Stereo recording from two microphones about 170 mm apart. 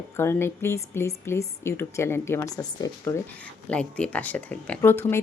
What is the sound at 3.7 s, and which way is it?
A woman's voice, 5° left (ahead or behind).